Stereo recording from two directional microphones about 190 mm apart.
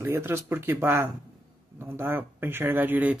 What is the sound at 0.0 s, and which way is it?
Speech, 15° right (ahead or behind).